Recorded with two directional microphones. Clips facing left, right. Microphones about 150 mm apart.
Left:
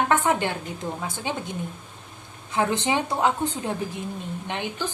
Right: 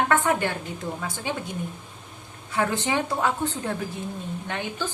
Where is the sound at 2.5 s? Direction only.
20° left (ahead or behind).